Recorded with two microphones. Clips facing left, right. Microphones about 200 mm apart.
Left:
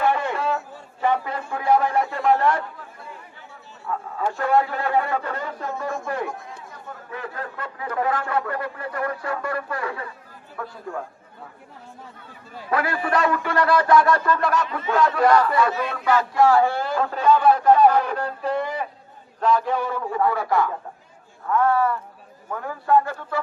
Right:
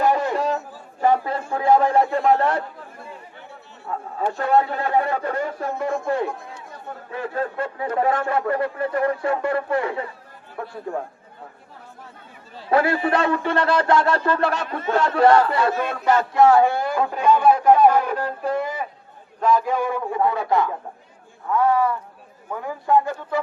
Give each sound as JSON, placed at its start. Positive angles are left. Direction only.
{"t": 0.0, "sound": "a sound", "side_deg": -40}
{"t": 1.0, "sound": "speech", "side_deg": -35}
{"t": 3.9, "sound": "speech", "side_deg": -30}
{"t": 12.7, "sound": "speech", "side_deg": -30}
{"t": 15.7, "sound": "speech", "side_deg": -50}
{"t": 16.3, "sound": "a man's voice", "side_deg": -20}